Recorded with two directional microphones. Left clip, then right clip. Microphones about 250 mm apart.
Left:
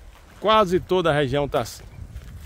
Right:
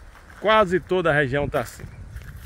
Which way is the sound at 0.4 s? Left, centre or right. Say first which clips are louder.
Even; centre.